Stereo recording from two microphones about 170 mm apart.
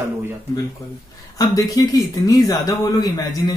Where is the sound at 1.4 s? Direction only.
20° left (ahead or behind).